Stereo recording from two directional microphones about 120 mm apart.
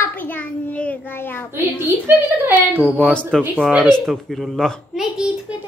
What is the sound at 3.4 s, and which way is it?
Speech, 10° right (ahead or behind).